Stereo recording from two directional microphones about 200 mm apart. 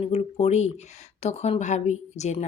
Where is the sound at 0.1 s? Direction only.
30° left (ahead or behind).